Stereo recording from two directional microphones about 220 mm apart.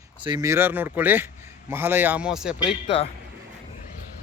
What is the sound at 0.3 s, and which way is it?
Speech, 15° right (ahead or behind).